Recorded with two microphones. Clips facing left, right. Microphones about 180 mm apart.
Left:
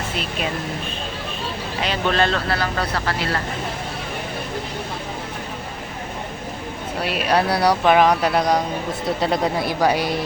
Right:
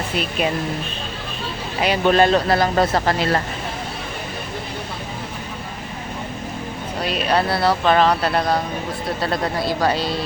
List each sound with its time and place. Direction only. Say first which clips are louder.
1.8 s a man's voice: right 5 dB; 15° right (ahead or behind)
2.5 s speech: right 6 dB; 40° right (ahead or behind)
7.0 s speech: even; 10° left (ahead or behind)